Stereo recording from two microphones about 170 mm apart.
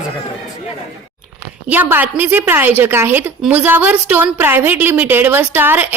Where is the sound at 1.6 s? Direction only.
10° right (ahead or behind).